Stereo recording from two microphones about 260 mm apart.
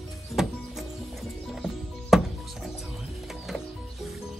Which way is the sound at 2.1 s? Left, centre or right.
Centre.